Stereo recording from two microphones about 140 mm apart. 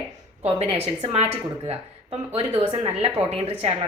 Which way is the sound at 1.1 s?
45° right (ahead or behind).